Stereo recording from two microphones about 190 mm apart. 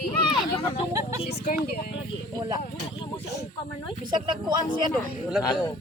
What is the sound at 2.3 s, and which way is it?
Speech, 20° right (ahead or behind).